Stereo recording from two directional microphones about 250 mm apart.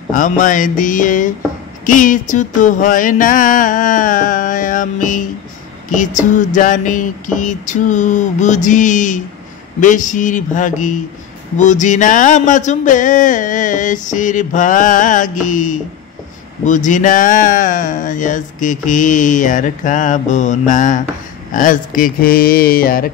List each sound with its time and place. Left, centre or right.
0.1 s speech: left